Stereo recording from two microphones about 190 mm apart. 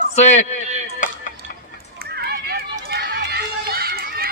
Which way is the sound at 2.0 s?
55° right (ahead or behind).